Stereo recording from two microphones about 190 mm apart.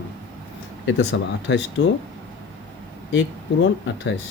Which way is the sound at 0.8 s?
70° left (ahead or behind).